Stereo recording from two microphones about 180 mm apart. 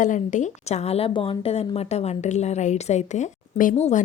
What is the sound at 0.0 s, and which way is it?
A woman's voice, 45° left (ahead or behind).